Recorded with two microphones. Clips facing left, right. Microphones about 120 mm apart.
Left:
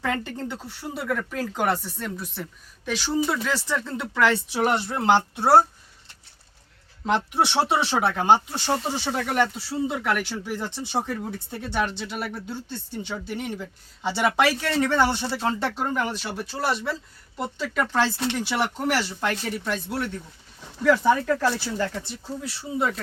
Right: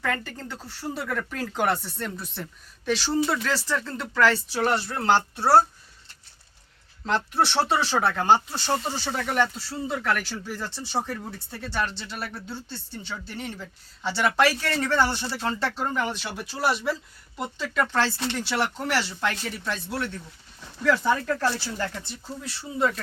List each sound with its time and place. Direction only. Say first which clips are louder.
0.0 s speech: left 2 dB; 20° left (ahead or behind)
1.0 s speech: left 7 dB; 5° left (ahead or behind)
3.5 s speech: left 1 dB; 15° left (ahead or behind)
7.0 s speech: left 1 dB; 15° left (ahead or behind)
15.8 s speech: left 1 dB; 5° left (ahead or behind)